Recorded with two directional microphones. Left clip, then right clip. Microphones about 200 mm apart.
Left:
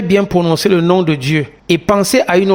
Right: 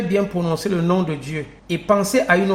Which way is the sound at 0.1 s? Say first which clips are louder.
Left 10 dB; 45° left (ahead or behind).